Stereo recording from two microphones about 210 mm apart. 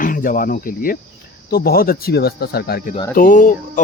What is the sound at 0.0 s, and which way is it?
Speech, 40° left (ahead or behind).